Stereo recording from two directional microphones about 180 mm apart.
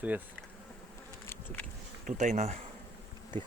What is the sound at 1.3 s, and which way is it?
Bee, 15° left (ahead or behind).